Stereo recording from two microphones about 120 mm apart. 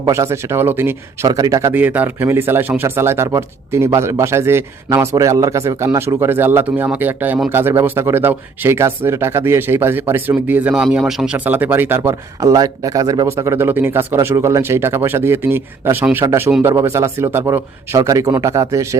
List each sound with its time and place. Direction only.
0.0 s speech: 25° right (ahead or behind)
1.7 s speech: 15° right (ahead or behind)